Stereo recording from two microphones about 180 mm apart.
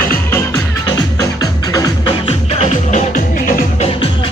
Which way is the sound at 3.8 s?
30° left (ahead or behind).